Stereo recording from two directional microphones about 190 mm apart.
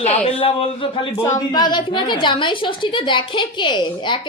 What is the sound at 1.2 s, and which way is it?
A woman's voice, 15° left (ahead or behind).